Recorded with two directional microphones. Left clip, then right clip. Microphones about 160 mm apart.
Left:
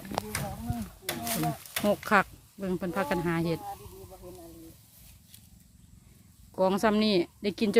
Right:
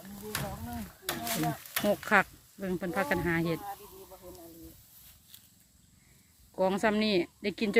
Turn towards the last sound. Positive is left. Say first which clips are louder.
# left 3 dB
turn(degrees=15)  # may be behind; listen again after turning